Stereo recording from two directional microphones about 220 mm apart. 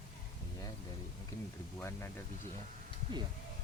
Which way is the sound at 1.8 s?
10° left (ahead or behind).